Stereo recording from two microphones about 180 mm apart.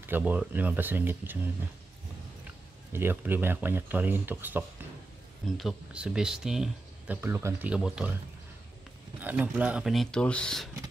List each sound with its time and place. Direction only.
0.0 s speech: 10° right (ahead or behind)
7.2 s speech: 15° right (ahead or behind)
9.2 s speech: 10° right (ahead or behind)